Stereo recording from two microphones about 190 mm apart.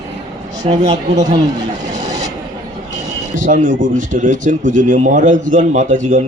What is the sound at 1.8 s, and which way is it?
Vehicle, 40° right (ahead or behind).